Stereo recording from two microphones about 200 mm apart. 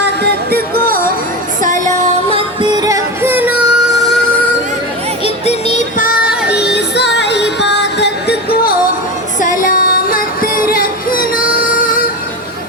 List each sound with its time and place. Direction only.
0.0 s music: 55° right (ahead or behind); by 2.4 s 40° right (ahead or behind)
2.6 s music: 20° right (ahead or behind)
5.2 s music: 30° left (ahead or behind)